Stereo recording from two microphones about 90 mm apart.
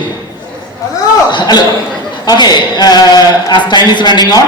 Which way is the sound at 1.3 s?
55° left (ahead or behind).